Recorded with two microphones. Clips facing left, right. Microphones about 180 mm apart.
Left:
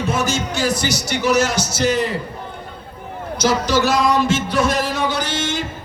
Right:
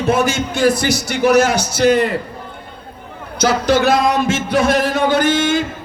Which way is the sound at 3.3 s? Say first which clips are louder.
Right 3 dB; 55° right (ahead or behind).